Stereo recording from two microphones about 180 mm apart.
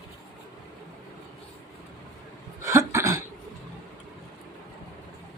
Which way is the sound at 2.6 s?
15° right (ahead or behind).